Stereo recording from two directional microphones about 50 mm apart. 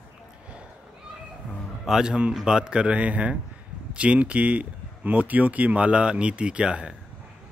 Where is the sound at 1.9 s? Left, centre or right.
Centre.